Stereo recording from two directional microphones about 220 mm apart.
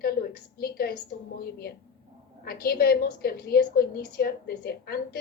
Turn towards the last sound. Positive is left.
turn(degrees=45)  # may be behind; listen again after turning